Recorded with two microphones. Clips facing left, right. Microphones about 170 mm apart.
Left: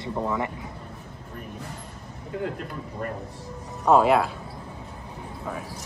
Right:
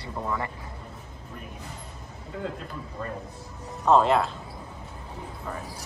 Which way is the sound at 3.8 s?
10° left (ahead or behind).